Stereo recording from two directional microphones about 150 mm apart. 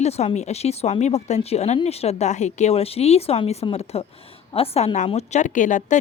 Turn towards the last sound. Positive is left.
turn(degrees=60)  # may be behind; listen again after turning